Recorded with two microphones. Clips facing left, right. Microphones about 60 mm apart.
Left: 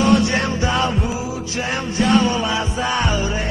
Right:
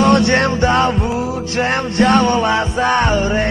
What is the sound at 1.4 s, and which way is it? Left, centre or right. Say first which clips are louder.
Music: right 6 dB; right.